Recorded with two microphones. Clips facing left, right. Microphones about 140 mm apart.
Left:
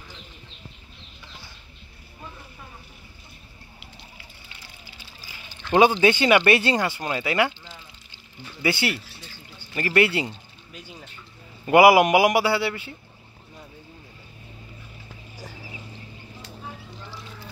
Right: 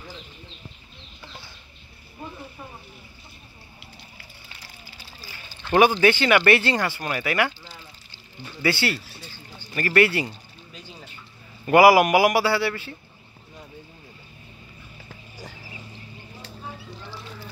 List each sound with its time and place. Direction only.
5.3 s speech: 20° left (ahead or behind)
8.6 s speech: 20° left (ahead or behind)
11.6 s speech: 20° left (ahead or behind)